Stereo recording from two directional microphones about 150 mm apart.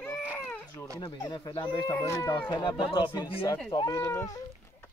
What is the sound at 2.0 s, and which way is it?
Speech, 20° left (ahead or behind).